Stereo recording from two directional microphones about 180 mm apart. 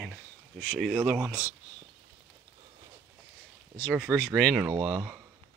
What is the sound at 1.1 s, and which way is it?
Speech, 5° right (ahead or behind).